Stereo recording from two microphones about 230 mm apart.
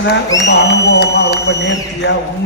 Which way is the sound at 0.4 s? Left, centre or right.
Left.